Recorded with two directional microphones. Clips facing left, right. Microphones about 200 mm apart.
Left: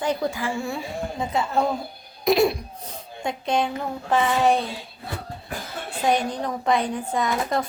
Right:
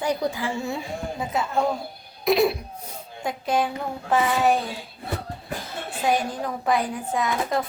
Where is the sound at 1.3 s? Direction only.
Centre (ahead or behind).